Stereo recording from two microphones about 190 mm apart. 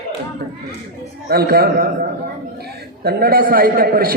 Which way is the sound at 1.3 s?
55° right (ahead or behind).